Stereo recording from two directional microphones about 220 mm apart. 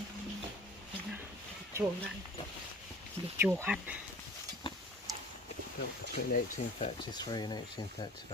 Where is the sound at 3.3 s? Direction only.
10° right (ahead or behind).